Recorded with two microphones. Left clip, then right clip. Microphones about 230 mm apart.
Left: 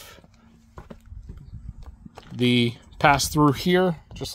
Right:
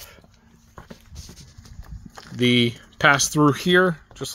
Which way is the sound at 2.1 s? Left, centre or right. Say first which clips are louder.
Right 3 dB; centre.